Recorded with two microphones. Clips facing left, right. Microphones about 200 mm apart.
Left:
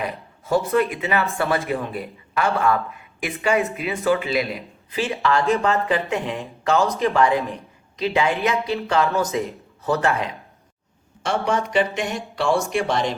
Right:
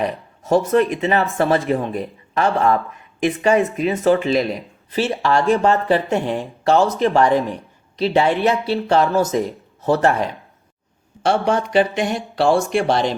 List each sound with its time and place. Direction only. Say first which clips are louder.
0.0 s a woman's voice: right 5 dB; 35° right (ahead or behind)